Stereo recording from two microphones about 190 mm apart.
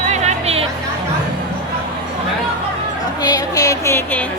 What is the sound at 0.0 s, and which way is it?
Music, 35° right (ahead or behind).